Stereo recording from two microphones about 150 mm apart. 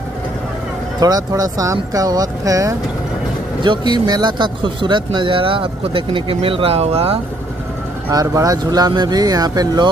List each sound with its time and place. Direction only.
0.9 s speech: 25° right (ahead or behind); by 7.2 s 40° right (ahead or behind)
8.1 s speech: 25° right (ahead or behind)